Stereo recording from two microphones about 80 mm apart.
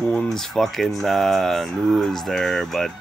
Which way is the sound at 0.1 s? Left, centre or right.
Centre.